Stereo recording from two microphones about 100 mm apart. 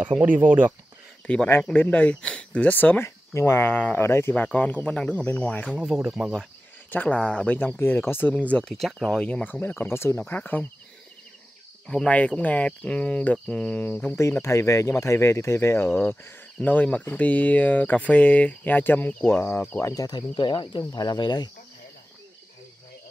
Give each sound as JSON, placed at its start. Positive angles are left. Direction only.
{"t": 0.0, "sound": "speech", "side_deg": -15}
{"t": 1.2, "sound": "speech", "side_deg": 10}
{"t": 6.0, "sound": "speech", "side_deg": -5}
{"t": 6.9, "sound": "speech", "side_deg": 15}
{"t": 9.2, "sound": "speech", "side_deg": 15}
{"t": 11.9, "sound": "speech", "side_deg": 10}
{"t": 19.8, "sound": "speech", "side_deg": 35}
{"t": 20.9, "sound": "speech", "side_deg": 45}